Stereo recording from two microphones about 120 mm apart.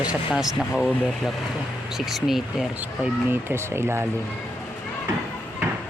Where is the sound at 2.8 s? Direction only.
15° right (ahead or behind).